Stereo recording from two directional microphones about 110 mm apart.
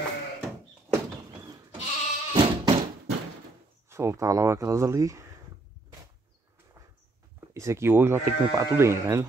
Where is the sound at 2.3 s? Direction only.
45° right (ahead or behind).